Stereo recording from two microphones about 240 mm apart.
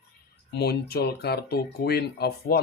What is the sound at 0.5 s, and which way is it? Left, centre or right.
Speech, left.